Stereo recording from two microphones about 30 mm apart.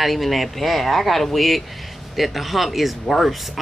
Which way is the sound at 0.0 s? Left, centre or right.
Centre.